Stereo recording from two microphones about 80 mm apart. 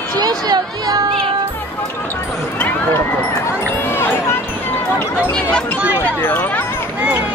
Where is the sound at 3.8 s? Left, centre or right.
Left.